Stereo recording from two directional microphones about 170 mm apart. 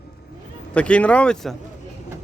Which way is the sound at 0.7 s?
5° left (ahead or behind).